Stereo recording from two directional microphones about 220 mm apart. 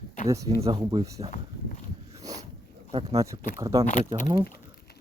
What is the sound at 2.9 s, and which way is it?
Speech, 25° right (ahead or behind).